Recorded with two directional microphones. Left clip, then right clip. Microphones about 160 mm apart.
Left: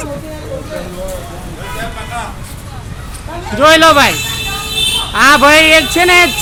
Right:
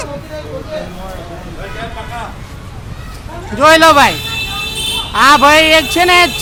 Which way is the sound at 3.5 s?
10° left (ahead or behind).